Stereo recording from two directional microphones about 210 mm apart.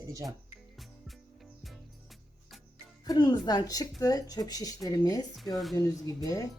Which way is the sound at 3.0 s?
20° left (ahead or behind).